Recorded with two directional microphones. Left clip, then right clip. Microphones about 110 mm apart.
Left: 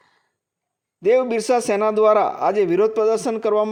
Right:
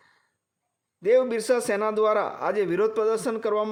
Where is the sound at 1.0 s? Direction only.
45° left (ahead or behind).